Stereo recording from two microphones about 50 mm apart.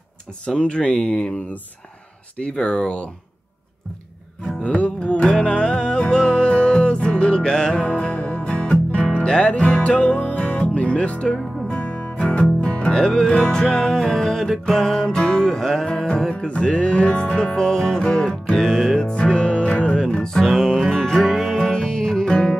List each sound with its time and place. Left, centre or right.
0.6 s speech: centre
4.6 s music: left
11.3 s music: centre
11.8 s music: left
13.3 s speech: centre
13.9 s music: centre
20.4 s music: centre